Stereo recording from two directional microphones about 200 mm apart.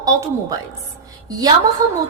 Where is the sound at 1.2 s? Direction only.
20° right (ahead or behind).